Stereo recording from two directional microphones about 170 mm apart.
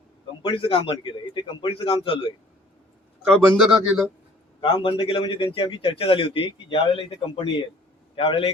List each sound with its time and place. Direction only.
0.4 s a man's voice: 30° left (ahead or behind)
3.2 s a man's voice: centre (ahead or behind)
4.6 s a man's voice: 30° left (ahead or behind)